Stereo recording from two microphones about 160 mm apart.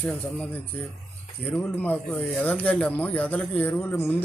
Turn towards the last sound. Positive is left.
turn(degrees=10)  # may be behind; listen again after turning